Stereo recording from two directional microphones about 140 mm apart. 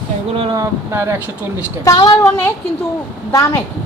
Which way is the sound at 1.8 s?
25° left (ahead or behind).